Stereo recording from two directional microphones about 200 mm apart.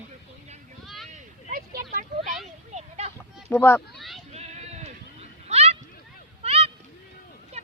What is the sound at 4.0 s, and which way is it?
Sheep, centre (ahead or behind).